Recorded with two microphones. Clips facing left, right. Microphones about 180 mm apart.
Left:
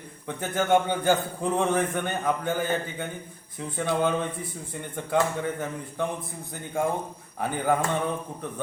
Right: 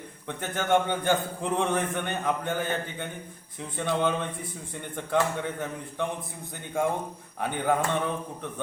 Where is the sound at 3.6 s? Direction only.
5° left (ahead or behind).